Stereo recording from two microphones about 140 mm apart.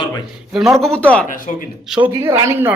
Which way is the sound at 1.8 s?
5° right (ahead or behind).